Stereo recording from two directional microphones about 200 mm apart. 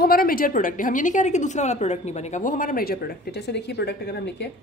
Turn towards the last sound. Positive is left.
turn(degrees=55)  # may be behind; listen again after turning